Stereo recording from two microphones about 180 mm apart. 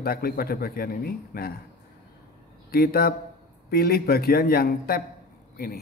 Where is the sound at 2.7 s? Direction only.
55° left (ahead or behind).